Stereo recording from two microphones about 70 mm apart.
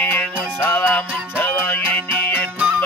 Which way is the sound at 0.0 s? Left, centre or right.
Left.